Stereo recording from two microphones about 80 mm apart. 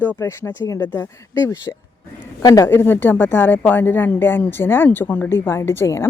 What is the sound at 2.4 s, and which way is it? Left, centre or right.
Speech, left.